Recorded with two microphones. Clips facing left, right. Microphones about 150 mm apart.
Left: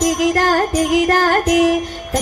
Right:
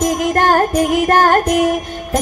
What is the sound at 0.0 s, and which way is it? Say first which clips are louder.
Music: even; 55° right (ahead or behind).